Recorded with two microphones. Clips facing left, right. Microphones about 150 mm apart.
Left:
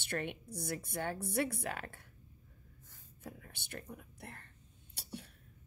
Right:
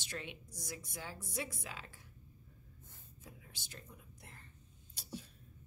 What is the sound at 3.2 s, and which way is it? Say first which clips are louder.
Speech: left 8 dB; 60° left (ahead or behind).